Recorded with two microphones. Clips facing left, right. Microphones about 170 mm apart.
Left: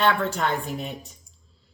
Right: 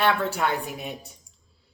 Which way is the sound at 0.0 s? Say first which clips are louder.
Left 1 dB; 10° right (ahead or behind).